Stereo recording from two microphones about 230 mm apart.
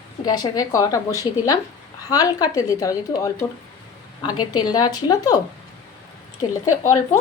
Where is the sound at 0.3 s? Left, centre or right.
Centre.